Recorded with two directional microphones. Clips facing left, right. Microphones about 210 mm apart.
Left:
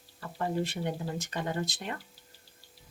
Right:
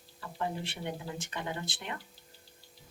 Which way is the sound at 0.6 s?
40° left (ahead or behind).